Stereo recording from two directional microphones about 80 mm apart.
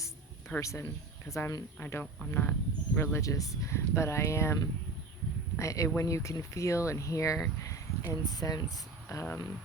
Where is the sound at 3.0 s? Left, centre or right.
Left.